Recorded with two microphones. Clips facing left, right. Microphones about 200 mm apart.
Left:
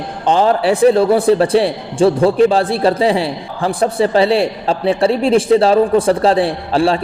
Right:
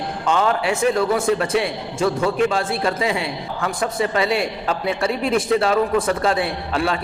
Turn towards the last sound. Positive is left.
turn(degrees=30)  # may be behind; listen again after turning